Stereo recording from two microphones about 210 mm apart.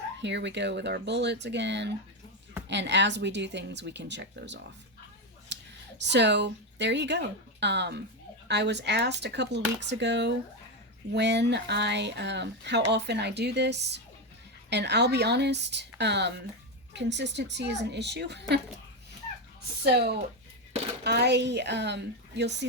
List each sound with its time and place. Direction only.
0.2 s speech: 55° right (ahead or behind)
5.5 s a sound: 55° right (ahead or behind)
6.0 s speech: 55° right (ahead or behind)
19.8 s speech: 50° right (ahead or behind)